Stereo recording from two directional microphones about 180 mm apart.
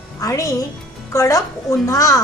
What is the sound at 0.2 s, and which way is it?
A woman's voice, 20° left (ahead or behind).